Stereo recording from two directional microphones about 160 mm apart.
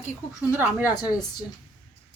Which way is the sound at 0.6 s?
10° right (ahead or behind).